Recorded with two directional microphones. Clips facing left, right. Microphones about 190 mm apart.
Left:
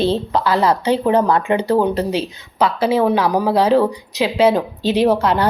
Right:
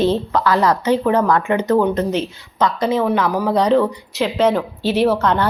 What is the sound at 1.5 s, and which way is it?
Speech, 30° left (ahead or behind).